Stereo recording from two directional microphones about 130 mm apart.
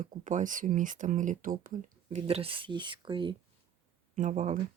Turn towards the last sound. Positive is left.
turn(degrees=-70)  # may be behind; listen again after turning